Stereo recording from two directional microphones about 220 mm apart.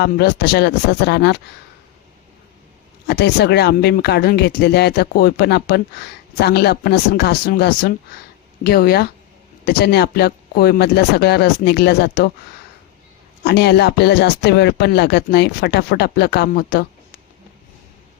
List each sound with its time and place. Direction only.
0.0 s speech: 45° left (ahead or behind)
3.1 s speech: 50° left (ahead or behind)
13.4 s speech: 50° left (ahead or behind)